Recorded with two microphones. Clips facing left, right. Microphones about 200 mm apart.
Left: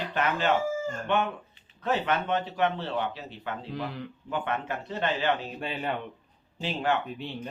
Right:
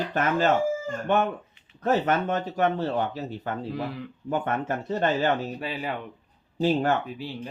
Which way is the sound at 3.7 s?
5° right (ahead or behind).